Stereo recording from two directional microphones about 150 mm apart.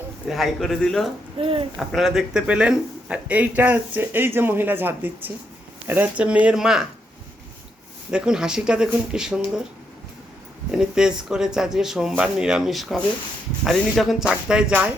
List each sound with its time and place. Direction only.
0.3 s speech: centre (ahead or behind)
1.4 s speech: 40° right (ahead or behind)
1.7 s speech: centre (ahead or behind)
8.1 s speech: 5° right (ahead or behind)
10.7 s speech: 5° right (ahead or behind)